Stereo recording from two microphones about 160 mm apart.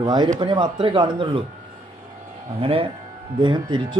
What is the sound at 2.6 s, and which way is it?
Speech, 35° right (ahead or behind).